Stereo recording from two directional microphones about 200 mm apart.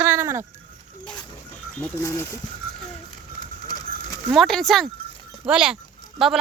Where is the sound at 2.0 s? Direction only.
15° left (ahead or behind).